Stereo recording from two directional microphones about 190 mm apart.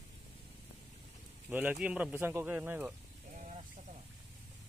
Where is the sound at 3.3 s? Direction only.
40° right (ahead or behind).